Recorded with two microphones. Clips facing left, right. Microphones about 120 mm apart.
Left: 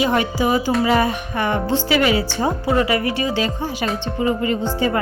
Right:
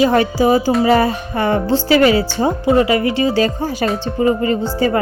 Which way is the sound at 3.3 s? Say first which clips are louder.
Right 5 dB; 40° right (ahead or behind).